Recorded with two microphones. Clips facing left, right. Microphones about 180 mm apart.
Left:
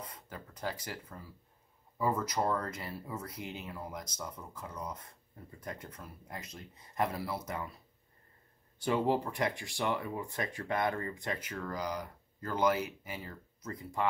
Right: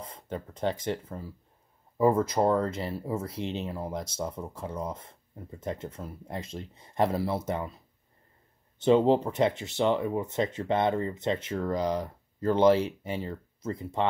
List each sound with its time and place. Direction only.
0.0 s speech: 25° right (ahead or behind)
8.7 s speech: 20° right (ahead or behind)